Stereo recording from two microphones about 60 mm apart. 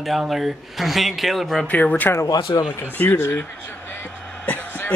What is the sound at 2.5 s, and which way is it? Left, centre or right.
Speech, left.